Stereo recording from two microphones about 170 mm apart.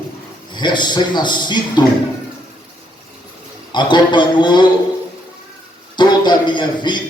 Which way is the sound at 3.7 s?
25° left (ahead or behind).